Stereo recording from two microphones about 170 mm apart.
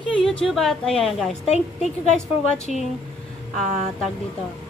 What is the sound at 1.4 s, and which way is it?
Speech, 40° left (ahead or behind).